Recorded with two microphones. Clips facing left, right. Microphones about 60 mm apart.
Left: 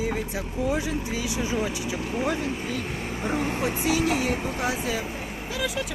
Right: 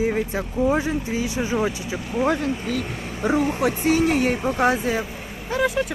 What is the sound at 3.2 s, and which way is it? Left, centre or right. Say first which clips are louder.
Speech: right 7 dB; right.